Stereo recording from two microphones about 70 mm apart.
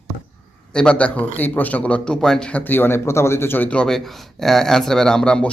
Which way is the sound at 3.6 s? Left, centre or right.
Centre.